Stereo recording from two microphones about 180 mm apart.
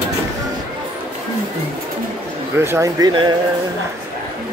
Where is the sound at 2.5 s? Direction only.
15° right (ahead or behind).